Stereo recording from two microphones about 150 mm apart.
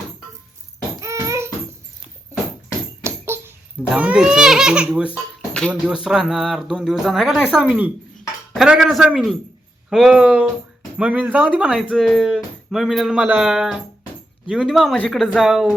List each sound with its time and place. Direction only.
1.0 s a sound: 20° right (ahead or behind)
3.0 s tambourine: 15° right (ahead or behind)
3.9 s speech: 10° right (ahead or behind)